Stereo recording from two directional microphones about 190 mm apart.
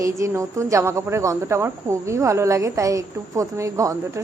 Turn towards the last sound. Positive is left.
turn(degrees=-15)  # may be behind; listen again after turning